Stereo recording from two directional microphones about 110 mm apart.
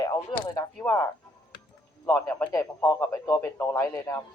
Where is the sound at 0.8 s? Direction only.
25° left (ahead or behind).